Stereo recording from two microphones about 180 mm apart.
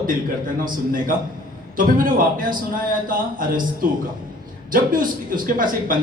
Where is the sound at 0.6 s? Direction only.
50° right (ahead or behind).